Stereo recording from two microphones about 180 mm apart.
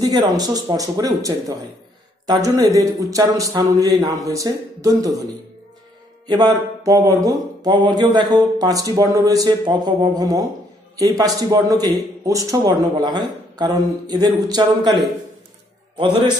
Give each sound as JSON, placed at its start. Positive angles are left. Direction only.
{"t": 0.4, "sound": "speech", "side_deg": -20}
{"t": 6.2, "sound": "speech", "side_deg": -20}